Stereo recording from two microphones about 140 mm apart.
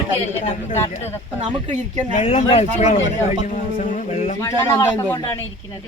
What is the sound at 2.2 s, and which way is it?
Speech, 45° left (ahead or behind).